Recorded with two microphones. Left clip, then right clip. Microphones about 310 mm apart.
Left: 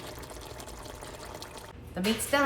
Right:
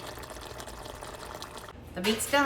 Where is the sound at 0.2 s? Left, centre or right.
Centre.